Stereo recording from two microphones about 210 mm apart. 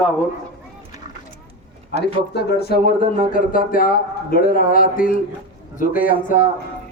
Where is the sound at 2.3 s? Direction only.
50° left (ahead or behind).